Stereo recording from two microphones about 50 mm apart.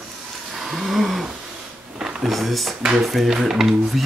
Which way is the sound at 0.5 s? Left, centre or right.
Centre.